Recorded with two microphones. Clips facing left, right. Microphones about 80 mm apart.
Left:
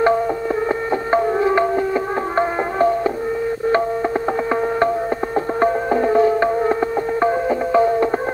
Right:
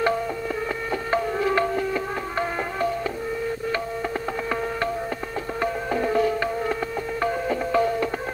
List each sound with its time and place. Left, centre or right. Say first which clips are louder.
1.1 s music: left 6 dB; left
5.6 s music: left 7 dB; left